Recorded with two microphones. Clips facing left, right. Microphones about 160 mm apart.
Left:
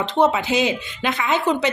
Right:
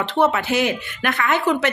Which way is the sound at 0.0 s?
15° left (ahead or behind).